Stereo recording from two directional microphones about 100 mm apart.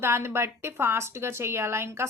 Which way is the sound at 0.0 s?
25° right (ahead or behind).